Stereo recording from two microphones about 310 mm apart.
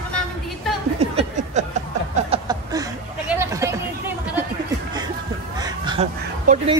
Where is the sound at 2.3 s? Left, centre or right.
Centre.